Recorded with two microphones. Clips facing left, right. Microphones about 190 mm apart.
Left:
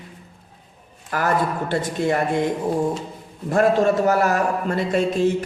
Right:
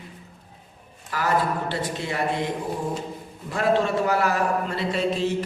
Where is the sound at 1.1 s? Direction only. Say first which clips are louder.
Left 2 dB; 50° left (ahead or behind).